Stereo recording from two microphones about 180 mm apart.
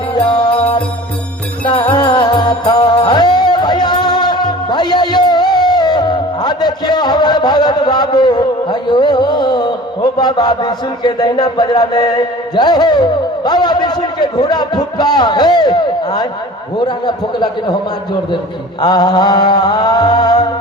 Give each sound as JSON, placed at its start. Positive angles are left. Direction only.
{"t": 0.3, "sound": "music", "side_deg": 25}
{"t": 1.6, "sound": "music", "side_deg": 30}
{"t": 10.2, "sound": "speech", "side_deg": 25}
{"t": 18.8, "sound": "speech", "side_deg": 25}